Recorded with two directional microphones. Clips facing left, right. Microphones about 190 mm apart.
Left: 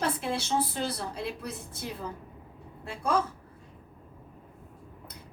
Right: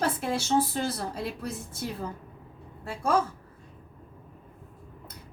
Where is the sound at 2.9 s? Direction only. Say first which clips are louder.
Right 2 dB; 50° right (ahead or behind).